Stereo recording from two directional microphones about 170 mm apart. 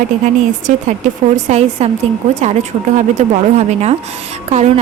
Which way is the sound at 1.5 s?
40° right (ahead or behind).